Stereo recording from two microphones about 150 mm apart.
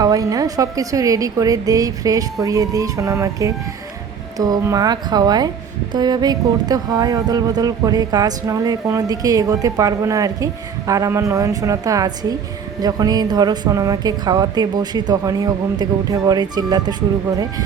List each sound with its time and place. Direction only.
0.0 s speech: 25° right (ahead or behind)